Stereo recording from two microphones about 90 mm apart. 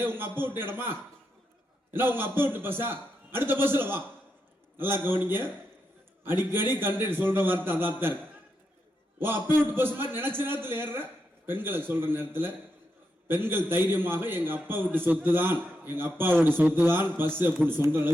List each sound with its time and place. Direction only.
0.0 s a man's voice: 25° right (ahead or behind)
2.0 s a man's voice: 25° right (ahead or behind)
5.0 s a man's voice: 25° right (ahead or behind)